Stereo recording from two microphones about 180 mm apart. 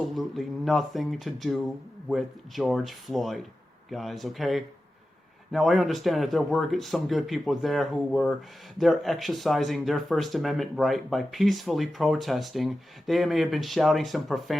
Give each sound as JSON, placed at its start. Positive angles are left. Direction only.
{"t": 0.2, "sound": "speech", "side_deg": 0}